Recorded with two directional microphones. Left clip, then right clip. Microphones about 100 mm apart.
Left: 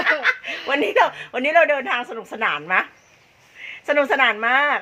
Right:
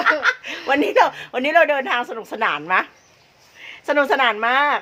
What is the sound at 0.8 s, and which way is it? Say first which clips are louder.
A woman's voice: right 1 dB; 15° right (ahead or behind).